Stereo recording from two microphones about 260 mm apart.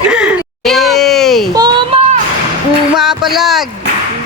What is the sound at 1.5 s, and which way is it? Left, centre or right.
Child singing, centre.